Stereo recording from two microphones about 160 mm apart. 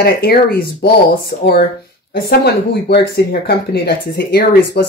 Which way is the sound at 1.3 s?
45° left (ahead or behind).